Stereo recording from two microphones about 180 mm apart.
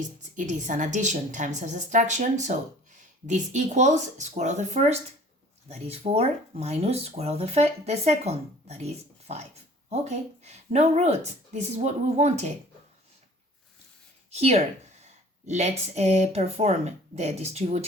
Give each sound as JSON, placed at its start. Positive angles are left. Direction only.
{"t": 0.3, "sound": "a woman's voice", "side_deg": -45}
{"t": 14.3, "sound": "speech", "side_deg": -35}